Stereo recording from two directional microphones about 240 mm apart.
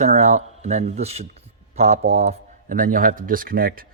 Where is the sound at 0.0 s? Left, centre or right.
Right.